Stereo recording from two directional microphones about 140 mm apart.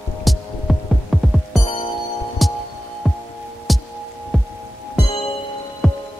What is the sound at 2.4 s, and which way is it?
Music, centre (ahead or behind).